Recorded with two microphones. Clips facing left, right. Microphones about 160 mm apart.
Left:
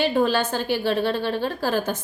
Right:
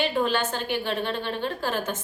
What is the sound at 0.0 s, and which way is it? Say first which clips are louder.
A woman's voice: left 4 dB; 35° left (ahead or behind).